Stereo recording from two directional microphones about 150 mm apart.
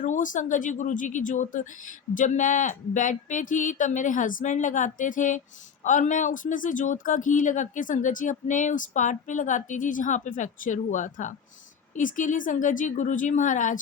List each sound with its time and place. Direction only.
0.0 s speech: 60° left (ahead or behind)